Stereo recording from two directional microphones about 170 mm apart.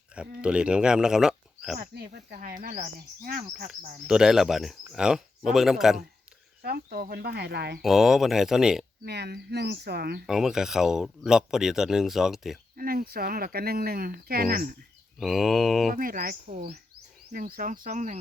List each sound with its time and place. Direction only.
0.4 s speech: 5° right (ahead or behind)
2.3 s speech: 55° right (ahead or behind)
3.7 s speech: 5° right (ahead or behind)
6.6 s speech: 65° right (ahead or behind); by 7.8 s 85° right
7.8 s speech: centre (ahead or behind)
9.0 s speech: 75° right (ahead or behind)
10.2 s speech: 5° right (ahead or behind)
12.7 s speech: 60° right (ahead or behind)
15.2 s speech: centre (ahead or behind)
15.9 s speech: 55° right (ahead or behind)